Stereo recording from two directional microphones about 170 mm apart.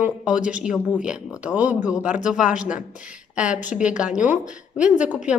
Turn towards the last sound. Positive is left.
turn(degrees=-10)  # may be behind; listen again after turning